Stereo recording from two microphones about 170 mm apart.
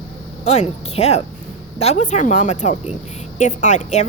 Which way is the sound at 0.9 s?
40° left (ahead or behind).